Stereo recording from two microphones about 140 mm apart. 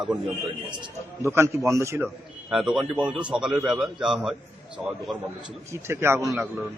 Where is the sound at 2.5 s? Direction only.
Centre (ahead or behind).